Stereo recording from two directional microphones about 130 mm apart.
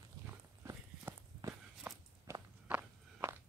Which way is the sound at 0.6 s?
20° right (ahead or behind).